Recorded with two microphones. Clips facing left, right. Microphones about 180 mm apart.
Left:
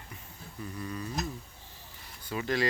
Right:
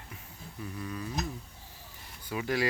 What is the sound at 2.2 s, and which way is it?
Speech, 10° right (ahead or behind).